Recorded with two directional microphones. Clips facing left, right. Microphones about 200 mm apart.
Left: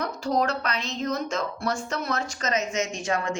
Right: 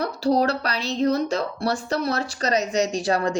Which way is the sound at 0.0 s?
35° right (ahead or behind).